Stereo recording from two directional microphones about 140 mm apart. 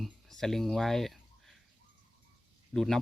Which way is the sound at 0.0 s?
5° left (ahead or behind).